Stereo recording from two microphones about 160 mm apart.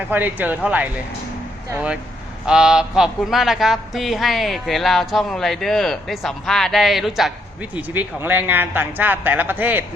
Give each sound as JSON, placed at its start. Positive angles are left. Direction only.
{"t": 0.1, "sound": "speech", "side_deg": -10}